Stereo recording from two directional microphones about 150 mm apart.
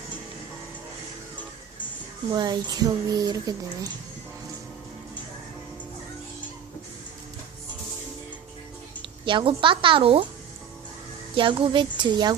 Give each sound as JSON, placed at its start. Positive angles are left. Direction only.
{"t": 2.3, "sound": "speech", "side_deg": -30}
{"t": 9.0, "sound": "speech", "side_deg": -35}
{"t": 11.3, "sound": "speech", "side_deg": -35}